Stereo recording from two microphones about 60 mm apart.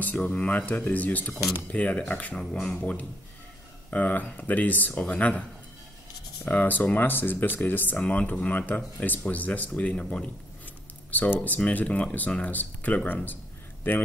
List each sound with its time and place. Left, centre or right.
0.0 s speech: left
2.5 s speech: centre
2.8 s speech: left
6.4 s speech: left